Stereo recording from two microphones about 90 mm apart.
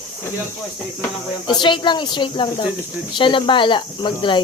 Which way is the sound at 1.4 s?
60° left (ahead or behind).